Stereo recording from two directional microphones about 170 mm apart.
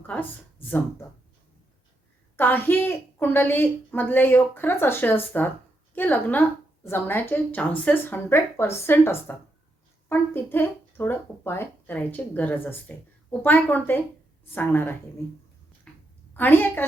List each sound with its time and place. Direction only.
0.1 s a woman's voice: 10° left (ahead or behind)
2.3 s a woman's voice: 10° left (ahead or behind)
15.9 s a sound: 5° left (ahead or behind)
16.3 s a woman's voice: 10° left (ahead or behind)